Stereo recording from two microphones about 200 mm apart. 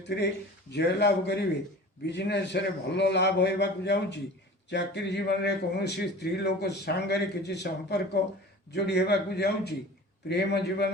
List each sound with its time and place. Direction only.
0.7 s a man's voice: 55° left (ahead or behind)